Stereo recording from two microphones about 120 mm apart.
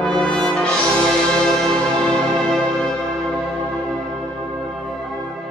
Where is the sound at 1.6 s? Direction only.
5° left (ahead or behind).